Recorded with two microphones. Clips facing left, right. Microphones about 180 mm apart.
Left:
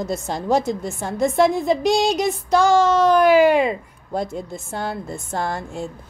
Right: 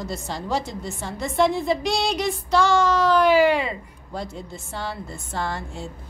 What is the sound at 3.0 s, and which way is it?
A woman's voice, 45° left (ahead or behind).